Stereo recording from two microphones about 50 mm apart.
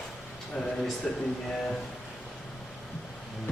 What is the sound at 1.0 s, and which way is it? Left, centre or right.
Speech, left.